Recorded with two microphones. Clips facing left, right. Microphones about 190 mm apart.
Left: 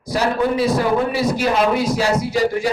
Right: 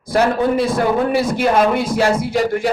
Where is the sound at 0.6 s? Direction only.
50° right (ahead or behind).